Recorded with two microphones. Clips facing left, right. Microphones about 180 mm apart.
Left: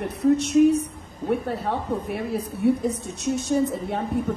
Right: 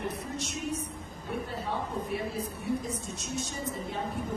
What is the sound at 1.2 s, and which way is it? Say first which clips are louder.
A woman's voice: left 10 dB; 65° left (ahead or behind).